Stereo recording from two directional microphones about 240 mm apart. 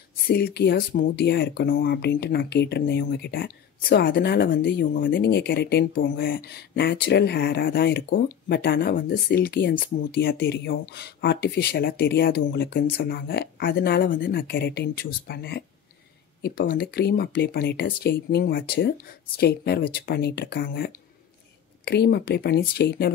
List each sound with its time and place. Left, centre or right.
0.3 s speech: left